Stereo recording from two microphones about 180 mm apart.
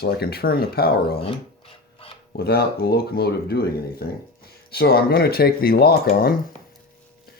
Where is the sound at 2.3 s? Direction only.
60° left (ahead or behind).